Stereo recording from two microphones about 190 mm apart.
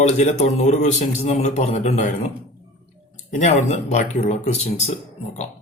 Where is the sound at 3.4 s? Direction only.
35° left (ahead or behind).